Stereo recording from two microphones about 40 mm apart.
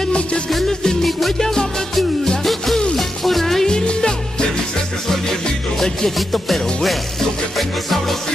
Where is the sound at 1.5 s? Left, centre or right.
Centre.